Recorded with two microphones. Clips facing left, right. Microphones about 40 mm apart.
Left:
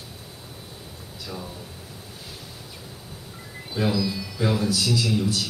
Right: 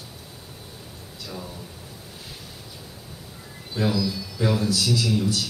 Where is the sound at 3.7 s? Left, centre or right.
Left.